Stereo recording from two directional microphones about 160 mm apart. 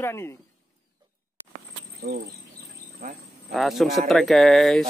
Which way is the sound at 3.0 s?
65° right (ahead or behind).